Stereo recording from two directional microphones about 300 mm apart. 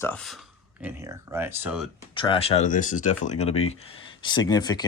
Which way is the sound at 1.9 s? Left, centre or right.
Centre.